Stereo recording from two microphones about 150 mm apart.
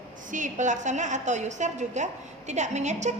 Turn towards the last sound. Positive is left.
turn(degrees=-50)  # may be behind; listen again after turning